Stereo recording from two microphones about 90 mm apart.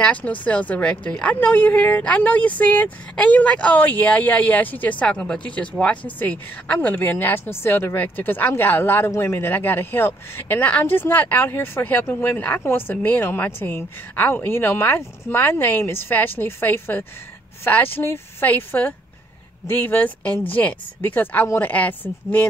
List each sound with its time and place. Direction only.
0.0 s a woman's voice: 15° left (ahead or behind)